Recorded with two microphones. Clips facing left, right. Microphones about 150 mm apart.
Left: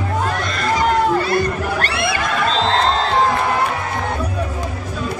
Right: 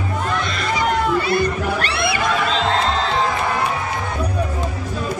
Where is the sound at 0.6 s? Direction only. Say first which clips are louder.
Left 5 dB; 45° left (ahead or behind).